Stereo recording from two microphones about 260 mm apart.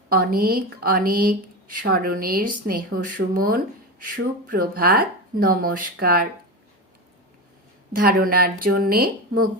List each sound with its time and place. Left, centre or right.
0.1 s speech: right
7.9 s speech: right